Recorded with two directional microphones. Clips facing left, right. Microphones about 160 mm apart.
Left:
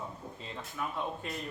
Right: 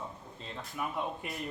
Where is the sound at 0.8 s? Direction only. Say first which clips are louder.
Even; 15° right (ahead or behind).